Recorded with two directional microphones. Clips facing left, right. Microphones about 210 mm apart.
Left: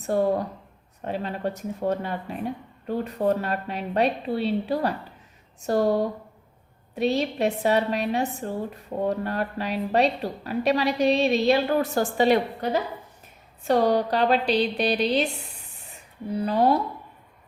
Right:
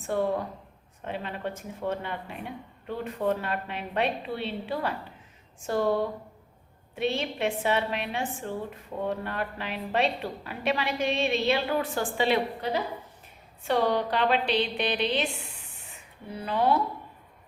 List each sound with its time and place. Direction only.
0.0 s speech: 40° left (ahead or behind)